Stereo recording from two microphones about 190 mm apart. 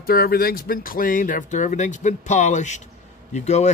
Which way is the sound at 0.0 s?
50° left (ahead or behind).